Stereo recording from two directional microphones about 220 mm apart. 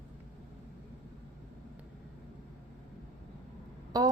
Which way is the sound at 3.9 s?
15° right (ahead or behind).